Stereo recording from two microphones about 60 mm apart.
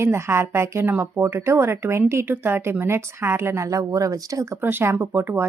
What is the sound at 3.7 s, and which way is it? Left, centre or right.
Speech, right.